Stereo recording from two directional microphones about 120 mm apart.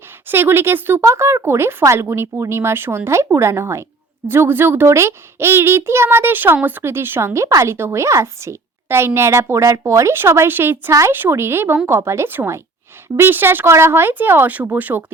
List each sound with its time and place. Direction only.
0.3 s a child's voice: 20° right (ahead or behind)